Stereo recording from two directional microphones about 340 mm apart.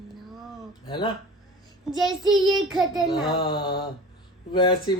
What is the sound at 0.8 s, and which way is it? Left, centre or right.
Mantra, centre.